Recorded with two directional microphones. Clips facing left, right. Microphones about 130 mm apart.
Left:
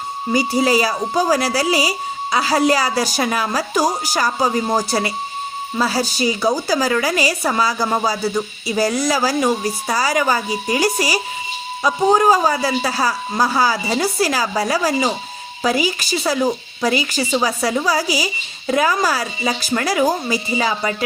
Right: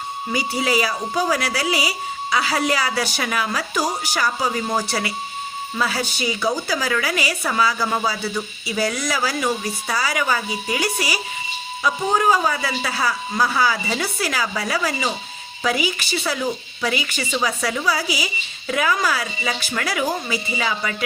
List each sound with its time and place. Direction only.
0.3 s a woman's voice: 40° left (ahead or behind)